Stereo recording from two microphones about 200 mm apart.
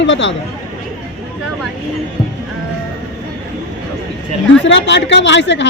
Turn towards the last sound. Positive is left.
turn(degrees=65)  # may be behind; listen again after turning